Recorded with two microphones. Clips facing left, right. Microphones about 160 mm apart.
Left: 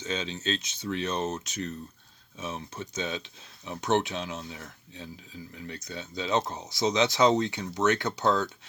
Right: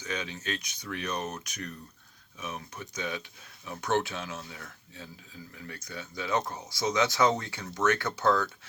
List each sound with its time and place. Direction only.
0.0 s speech: 25° left (ahead or behind)